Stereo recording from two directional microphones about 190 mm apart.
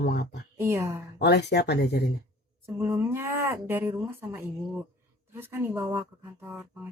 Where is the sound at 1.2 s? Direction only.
60° left (ahead or behind).